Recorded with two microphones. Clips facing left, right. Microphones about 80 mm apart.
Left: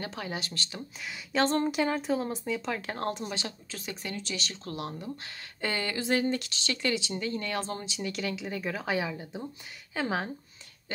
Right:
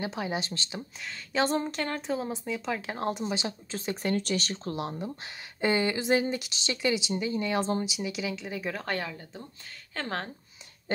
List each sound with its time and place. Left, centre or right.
0.0 s speech: centre
1.3 s speech: centre
1.7 s speech: centre
3.3 s speech: centre
3.7 s speech: right
4.6 s speech: right; by 10.3 s centre